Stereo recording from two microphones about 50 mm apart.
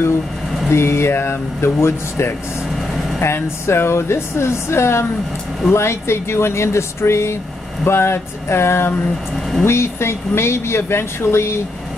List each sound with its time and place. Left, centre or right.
0.7 s speech: left
3.6 s speech: left
7.8 s speech: left